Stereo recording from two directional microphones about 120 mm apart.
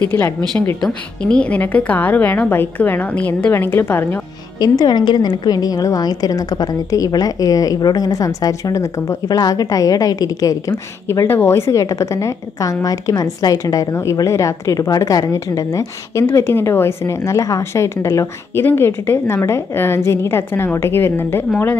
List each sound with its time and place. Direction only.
0.8 s a woman's voice: 10° left (ahead or behind)
4.6 s a woman's voice: 35° left (ahead or behind); by 21.7 s 15° left (ahead or behind)